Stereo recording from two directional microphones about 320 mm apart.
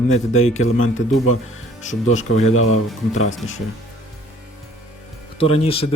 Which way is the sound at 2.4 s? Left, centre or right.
Left.